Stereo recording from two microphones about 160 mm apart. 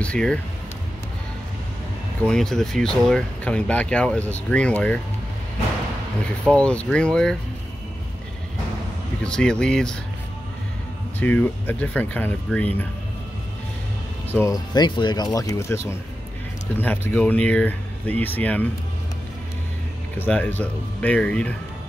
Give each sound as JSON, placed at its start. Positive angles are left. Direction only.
{"t": 0.0, "sound": "speech", "side_deg": 5}
{"t": 2.2, "sound": "speech", "side_deg": 5}
{"t": 6.4, "sound": "speech", "side_deg": 5}
{"t": 9.2, "sound": "speech", "side_deg": 5}
{"t": 11.1, "sound": "speech", "side_deg": 10}
{"t": 14.3, "sound": "speech", "side_deg": 20}
{"t": 20.2, "sound": "speech", "side_deg": 10}